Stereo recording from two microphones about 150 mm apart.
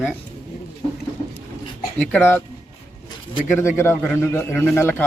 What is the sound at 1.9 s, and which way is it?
Speech, 10° left (ahead or behind).